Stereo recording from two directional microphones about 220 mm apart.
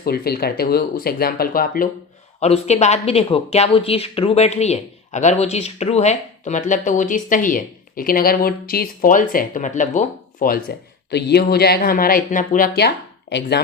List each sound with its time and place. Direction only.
0.0 s speech: 45° left (ahead or behind)
2.4 s speech: 30° left (ahead or behind)